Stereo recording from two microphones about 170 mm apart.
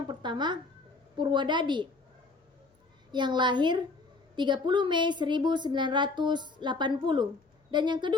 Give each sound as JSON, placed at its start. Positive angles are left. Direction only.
{"t": 0.1, "sound": "a sound", "side_deg": -25}
{"t": 1.1, "sound": "a woman's voice", "side_deg": -25}
{"t": 3.1, "sound": "a woman's voice", "side_deg": -25}